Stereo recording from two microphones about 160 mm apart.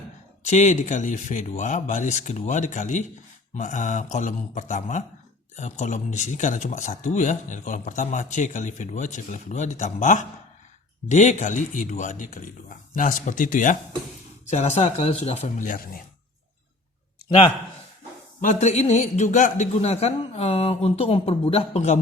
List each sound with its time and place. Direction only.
0.5 s speech: 50° left (ahead or behind)
14.4 s speech: 45° left (ahead or behind); by 16.0 s 65° left (ahead or behind)
18.4 s a man's voice: 45° left (ahead or behind)